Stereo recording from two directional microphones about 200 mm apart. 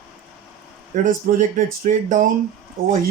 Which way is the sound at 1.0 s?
40° right (ahead or behind).